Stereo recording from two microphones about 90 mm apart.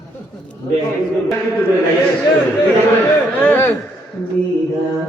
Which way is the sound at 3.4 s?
20° left (ahead or behind).